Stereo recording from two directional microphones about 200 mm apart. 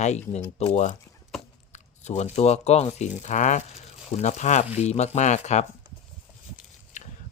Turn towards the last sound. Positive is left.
turn(degrees=35)  # may be behind; listen again after turning